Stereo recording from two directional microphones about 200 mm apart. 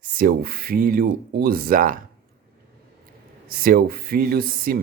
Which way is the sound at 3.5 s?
45° right (ahead or behind).